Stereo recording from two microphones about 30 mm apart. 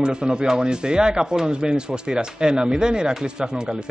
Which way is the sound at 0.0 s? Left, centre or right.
Right.